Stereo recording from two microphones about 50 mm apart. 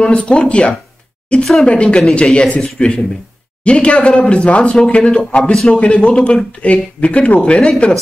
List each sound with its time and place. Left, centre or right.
0.0 s speech: left
1.4 s speech: centre
1.7 s speech: centre
5.4 s speech: centre
5.7 s speech: left
6.6 s speech: left